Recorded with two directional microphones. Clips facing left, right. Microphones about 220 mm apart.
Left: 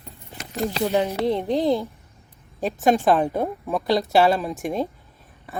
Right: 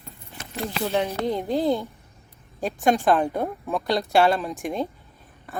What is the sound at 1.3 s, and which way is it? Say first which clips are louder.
Speech: left 1 dB; centre (ahead or behind).